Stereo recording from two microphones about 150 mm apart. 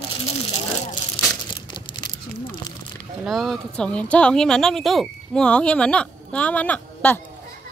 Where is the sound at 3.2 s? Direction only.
Centre (ahead or behind).